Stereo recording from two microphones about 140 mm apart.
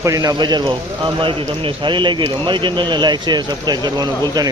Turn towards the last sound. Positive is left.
turn(degrees=-30)  # may be behind; listen again after turning